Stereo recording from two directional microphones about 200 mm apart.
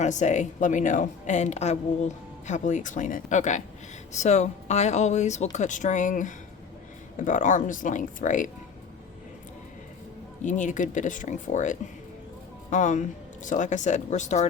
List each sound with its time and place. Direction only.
0.0 s a woman's voice: 35° left (ahead or behind)
10.4 s a woman's voice: 40° left (ahead or behind)